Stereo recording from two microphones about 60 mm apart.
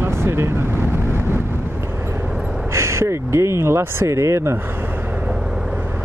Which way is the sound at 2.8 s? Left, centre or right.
Right.